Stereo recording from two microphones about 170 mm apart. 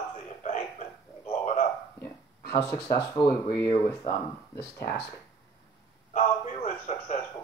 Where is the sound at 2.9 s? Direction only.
15° left (ahead or behind).